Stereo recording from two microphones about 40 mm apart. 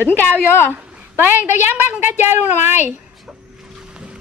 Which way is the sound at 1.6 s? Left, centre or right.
Right.